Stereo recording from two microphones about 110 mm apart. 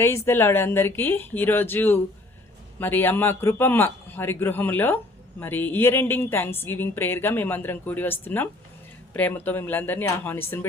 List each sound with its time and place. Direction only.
0.0 s a woman's voice: 20° left (ahead or behind)